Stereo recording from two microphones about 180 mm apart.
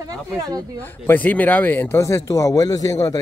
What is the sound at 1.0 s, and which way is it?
Speech, 10° left (ahead or behind).